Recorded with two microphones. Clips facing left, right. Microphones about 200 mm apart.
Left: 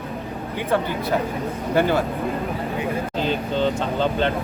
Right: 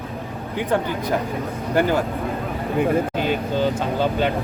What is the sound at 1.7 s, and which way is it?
Speech, 15° right (ahead or behind).